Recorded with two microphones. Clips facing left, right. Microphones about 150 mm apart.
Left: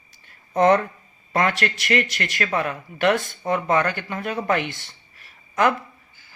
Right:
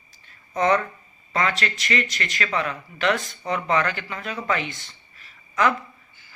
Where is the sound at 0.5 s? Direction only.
55° left (ahead or behind).